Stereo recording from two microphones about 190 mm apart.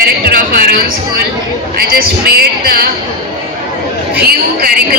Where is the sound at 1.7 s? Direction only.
50° right (ahead or behind).